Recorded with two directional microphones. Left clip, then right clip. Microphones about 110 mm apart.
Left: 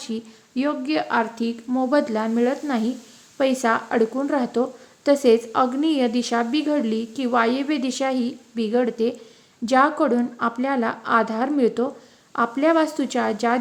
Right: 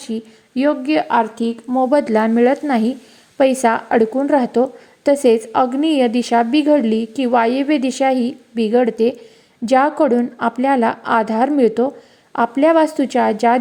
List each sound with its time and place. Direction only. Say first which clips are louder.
0.0 s a woman's voice: right 5 dB; 20° right (ahead or behind)
1.9 s a woman's voice: right 5 dB; 55° right (ahead or behind); by 13.6 s 30° right (ahead or behind)